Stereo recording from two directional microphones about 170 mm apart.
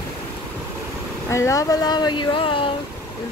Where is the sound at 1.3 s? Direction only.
20° left (ahead or behind).